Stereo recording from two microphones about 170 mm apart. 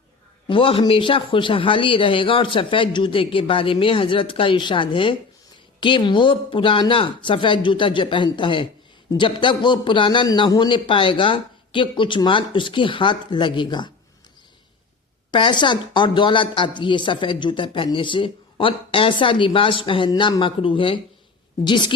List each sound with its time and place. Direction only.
0.4 s a man's voice: 30° left (ahead or behind)
15.3 s a woman's voice: 25° left (ahead or behind)